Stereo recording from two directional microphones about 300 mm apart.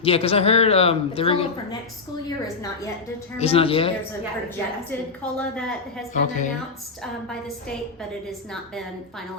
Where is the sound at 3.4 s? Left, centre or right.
Centre.